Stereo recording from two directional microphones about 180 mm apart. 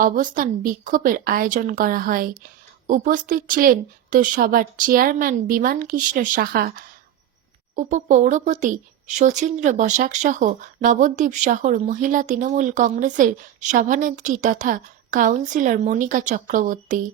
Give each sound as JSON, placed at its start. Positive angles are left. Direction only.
{"t": 0.0, "sound": "speech", "side_deg": -45}